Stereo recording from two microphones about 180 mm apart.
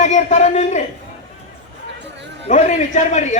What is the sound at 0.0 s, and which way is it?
Speech, 40° left (ahead or behind).